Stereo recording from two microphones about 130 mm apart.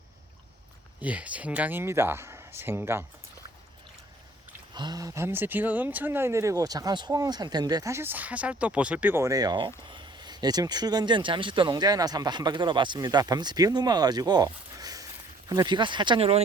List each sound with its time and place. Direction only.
1.0 s speech: 10° right (ahead or behind)
4.7 s speech: 35° right (ahead or behind)